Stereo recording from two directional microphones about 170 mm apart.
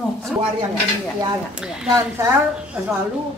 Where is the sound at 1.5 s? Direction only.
5° right (ahead or behind).